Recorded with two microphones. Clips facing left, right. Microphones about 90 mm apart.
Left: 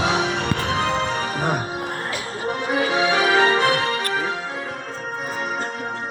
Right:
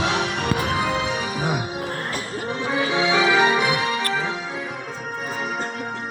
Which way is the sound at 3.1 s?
20° right (ahead or behind).